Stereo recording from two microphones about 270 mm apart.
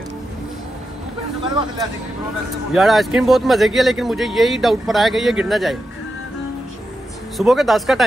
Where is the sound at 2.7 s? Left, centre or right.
Centre.